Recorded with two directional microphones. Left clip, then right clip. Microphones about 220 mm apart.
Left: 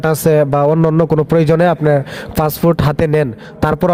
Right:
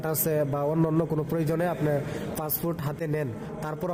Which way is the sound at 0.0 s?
35° left (ahead or behind).